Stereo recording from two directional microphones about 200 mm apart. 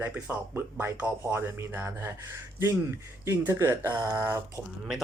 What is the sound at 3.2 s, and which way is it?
Speech, 15° right (ahead or behind).